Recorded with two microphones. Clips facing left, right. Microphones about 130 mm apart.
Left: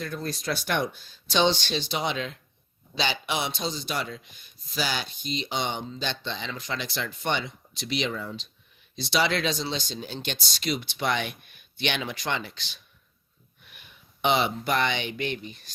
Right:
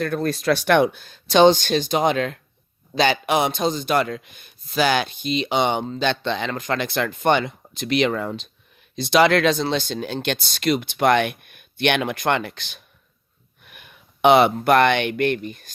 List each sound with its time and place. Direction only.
0.0 s a man's voice: 60° right (ahead or behind)